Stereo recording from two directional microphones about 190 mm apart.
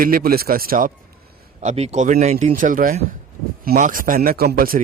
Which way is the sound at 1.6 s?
35° right (ahead or behind).